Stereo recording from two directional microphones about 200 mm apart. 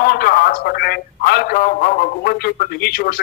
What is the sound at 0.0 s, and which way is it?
A man's voice, 45° left (ahead or behind).